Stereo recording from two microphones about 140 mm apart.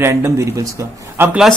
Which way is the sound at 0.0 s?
20° right (ahead or behind).